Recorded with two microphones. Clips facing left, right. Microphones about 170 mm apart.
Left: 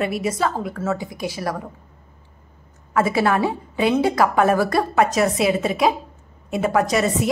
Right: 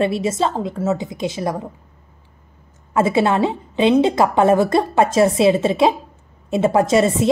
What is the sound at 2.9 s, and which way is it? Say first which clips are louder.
A woman's voice: right 2 dB; 25° right (ahead or behind).